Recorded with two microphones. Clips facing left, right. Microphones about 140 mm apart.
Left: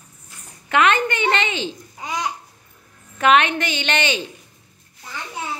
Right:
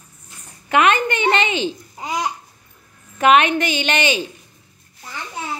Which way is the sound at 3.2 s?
15° right (ahead or behind).